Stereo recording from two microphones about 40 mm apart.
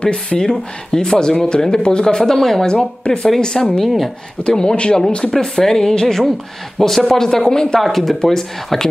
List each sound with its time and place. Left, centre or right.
0.0 s speech: left
3.8 s speech: centre
4.4 s speech: left
5.3 s speech: centre